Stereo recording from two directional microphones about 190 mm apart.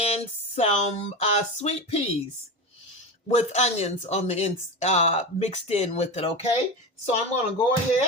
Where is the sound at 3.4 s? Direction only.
35° left (ahead or behind).